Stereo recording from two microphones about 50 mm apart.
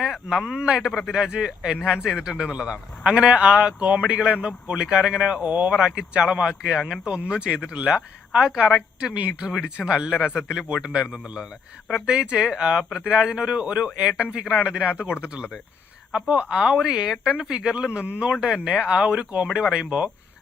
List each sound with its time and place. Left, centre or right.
0.0 s a man's voice: centre
0.9 s speech: centre
1.1 s speech: centre; by 5.7 s right
5.7 s a man's voice: centre